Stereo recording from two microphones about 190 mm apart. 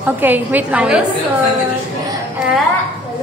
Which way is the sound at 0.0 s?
10° right (ahead or behind).